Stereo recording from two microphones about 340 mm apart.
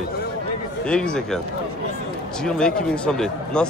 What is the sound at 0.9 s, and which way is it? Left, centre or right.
Speech, centre.